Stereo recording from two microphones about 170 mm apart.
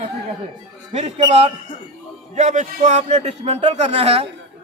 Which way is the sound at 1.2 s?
35° right (ahead or behind).